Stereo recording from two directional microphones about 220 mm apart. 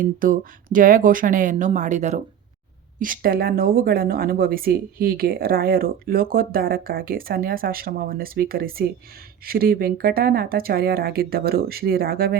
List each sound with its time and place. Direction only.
0.0 s speech: 40° right (ahead or behind)